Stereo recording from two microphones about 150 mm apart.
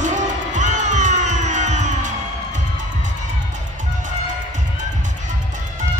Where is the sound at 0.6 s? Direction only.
55° right (ahead or behind).